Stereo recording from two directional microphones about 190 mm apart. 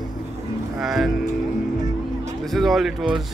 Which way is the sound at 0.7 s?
Centre (ahead or behind).